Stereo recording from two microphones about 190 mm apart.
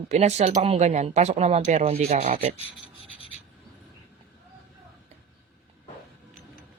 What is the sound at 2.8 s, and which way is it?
Rub, 30° left (ahead or behind).